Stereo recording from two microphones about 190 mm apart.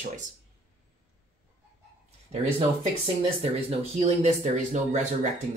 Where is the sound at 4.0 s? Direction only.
35° right (ahead or behind).